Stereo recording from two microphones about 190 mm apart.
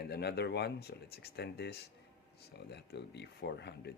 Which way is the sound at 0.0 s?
60° left (ahead or behind).